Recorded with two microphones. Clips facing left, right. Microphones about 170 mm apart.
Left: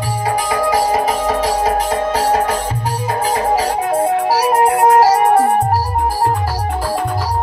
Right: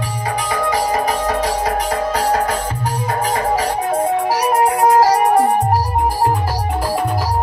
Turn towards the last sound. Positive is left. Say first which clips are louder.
# left 1 dB
turn(degrees=5)  # may be behind; listen again after turning